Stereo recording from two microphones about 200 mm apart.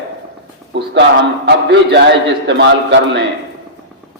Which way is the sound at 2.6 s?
60° right (ahead or behind).